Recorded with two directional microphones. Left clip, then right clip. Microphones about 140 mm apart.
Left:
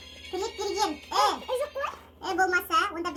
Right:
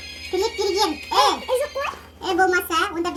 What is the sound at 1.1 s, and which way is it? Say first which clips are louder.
Music: right 7 dB; 10° left (ahead or behind).